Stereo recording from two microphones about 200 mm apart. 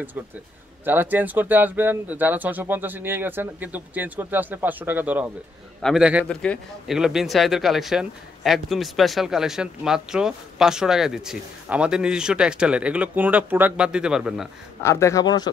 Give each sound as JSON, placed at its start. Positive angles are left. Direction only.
{"t": 0.8, "sound": "speech", "side_deg": -10}
{"t": 14.8, "sound": "speech", "side_deg": 15}